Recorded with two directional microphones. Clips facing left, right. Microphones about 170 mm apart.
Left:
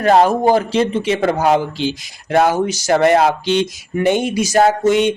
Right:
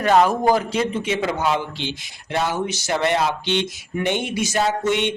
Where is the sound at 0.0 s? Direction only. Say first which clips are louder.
Left 4 dB; 35° left (ahead or behind).